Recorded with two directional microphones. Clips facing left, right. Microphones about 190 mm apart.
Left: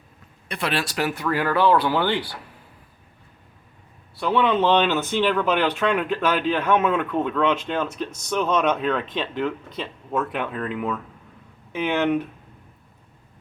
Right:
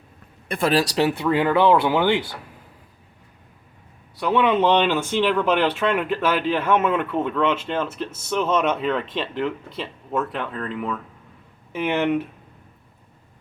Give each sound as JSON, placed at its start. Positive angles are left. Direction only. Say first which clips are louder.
{"t": 0.4, "sound": "speech", "louder": "right 6 dB", "side_deg": -50}
{"t": 4.2, "sound": "speech", "louder": "right 1 dB", "side_deg": -5}
{"t": 5.4, "sound": "speech", "louder": "right 2 dB", "side_deg": 10}
{"t": 5.6, "sound": "speech", "louder": "right 1 dB", "side_deg": -5}